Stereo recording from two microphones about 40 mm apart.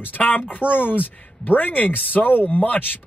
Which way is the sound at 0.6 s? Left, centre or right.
Left.